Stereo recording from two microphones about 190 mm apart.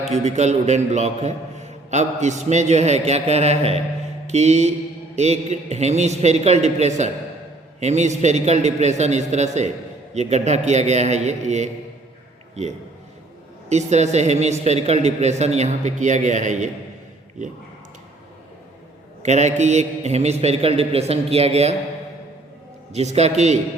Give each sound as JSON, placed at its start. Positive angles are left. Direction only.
{"t": 0.1, "sound": "a man's voice", "side_deg": -35}
{"t": 19.2, "sound": "a man's voice", "side_deg": -35}
{"t": 22.9, "sound": "a man's voice", "side_deg": -35}